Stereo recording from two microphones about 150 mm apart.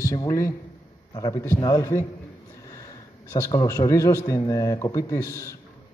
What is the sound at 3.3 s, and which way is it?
A man's voice, 25° left (ahead or behind).